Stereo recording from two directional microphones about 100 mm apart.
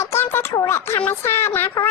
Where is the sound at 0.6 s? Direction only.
25° left (ahead or behind).